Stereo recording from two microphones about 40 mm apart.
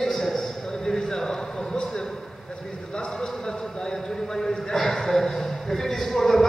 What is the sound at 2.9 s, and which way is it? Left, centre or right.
A man's voice, left.